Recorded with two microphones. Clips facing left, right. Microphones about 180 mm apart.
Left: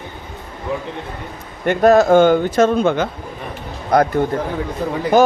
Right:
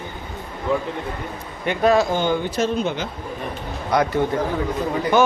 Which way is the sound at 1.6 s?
45° left (ahead or behind).